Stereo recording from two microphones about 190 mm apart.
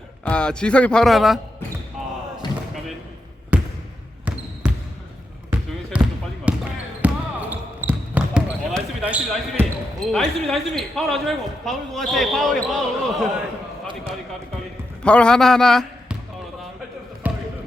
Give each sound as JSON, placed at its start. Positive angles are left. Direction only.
{"t": 0.3, "sound": "speech", "side_deg": 5}
{"t": 2.0, "sound": "basketball bounce", "side_deg": 0}
{"t": 3.5, "sound": "basketball bounce", "side_deg": -10}
{"t": 5.9, "sound": "basketball bounce", "side_deg": -5}
{"t": 7.0, "sound": "a sound", "side_deg": -10}
{"t": 7.5, "sound": "basketball bounce", "side_deg": -10}
{"t": 10.1, "sound": "speech", "side_deg": 0}
{"t": 15.0, "sound": "speech", "side_deg": 5}
{"t": 17.2, "sound": "basketball bounce", "side_deg": -10}